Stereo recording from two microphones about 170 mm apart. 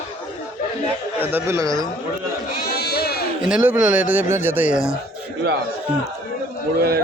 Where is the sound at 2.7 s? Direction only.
70° left (ahead or behind).